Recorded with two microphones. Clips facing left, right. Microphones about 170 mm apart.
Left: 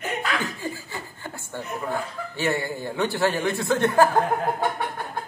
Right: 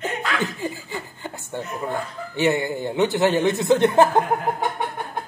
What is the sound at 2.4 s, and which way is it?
A man's voice, 20° right (ahead or behind).